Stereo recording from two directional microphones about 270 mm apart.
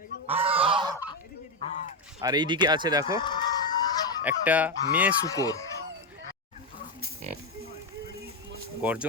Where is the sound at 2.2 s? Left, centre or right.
Centre.